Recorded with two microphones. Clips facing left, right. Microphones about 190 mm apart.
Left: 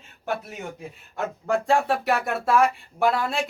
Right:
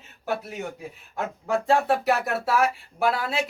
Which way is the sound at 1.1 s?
Centre (ahead or behind).